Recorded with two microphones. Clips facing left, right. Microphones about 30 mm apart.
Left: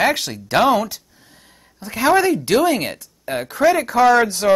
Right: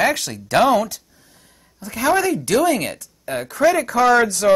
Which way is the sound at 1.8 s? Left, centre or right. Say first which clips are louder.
Left 3 dB; left.